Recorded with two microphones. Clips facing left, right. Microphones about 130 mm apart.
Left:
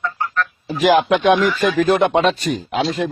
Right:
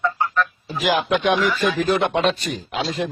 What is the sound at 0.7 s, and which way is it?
Speech, 50° left (ahead or behind).